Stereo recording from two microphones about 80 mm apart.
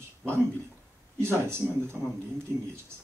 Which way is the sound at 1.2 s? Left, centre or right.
Right.